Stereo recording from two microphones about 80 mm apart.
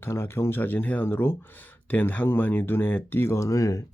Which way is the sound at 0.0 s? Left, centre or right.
Left.